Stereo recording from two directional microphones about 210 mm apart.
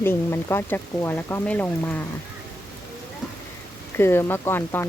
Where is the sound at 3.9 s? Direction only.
10° left (ahead or behind).